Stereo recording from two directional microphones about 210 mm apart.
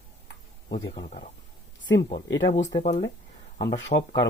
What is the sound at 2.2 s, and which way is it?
Speech, 60° left (ahead or behind).